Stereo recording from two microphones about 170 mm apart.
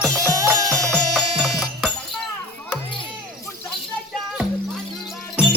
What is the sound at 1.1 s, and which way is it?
Music, centre (ahead or behind).